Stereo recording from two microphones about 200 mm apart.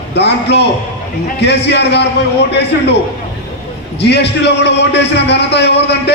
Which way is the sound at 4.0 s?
60° left (ahead or behind).